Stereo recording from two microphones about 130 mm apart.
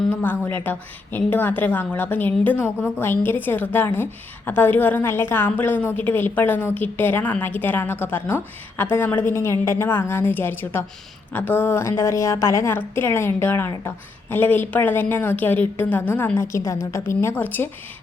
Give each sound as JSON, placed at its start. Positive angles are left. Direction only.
{"t": 0.1, "sound": "a woman's voice", "side_deg": 15}